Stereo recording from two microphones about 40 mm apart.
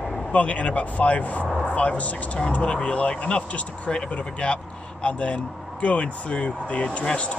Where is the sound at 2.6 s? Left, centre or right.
Left.